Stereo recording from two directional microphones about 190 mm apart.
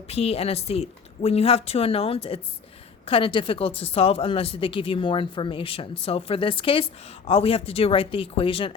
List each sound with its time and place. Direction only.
0.1 s speech: 30° left (ahead or behind)